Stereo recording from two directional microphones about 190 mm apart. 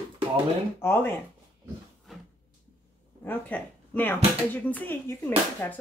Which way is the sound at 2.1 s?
Centre (ahead or behind).